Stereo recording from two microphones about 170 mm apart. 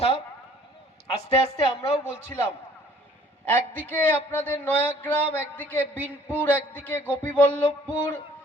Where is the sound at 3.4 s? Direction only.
10° left (ahead or behind).